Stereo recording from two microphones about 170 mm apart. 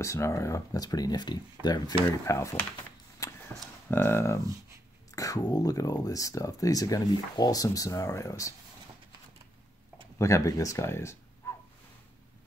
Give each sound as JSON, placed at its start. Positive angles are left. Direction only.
{"t": 0.0, "sound": "speech", "side_deg": 15}
{"t": 3.2, "sound": "a sound", "side_deg": 15}
{"t": 3.9, "sound": "speech", "side_deg": 15}
{"t": 10.1, "sound": "speech", "side_deg": 15}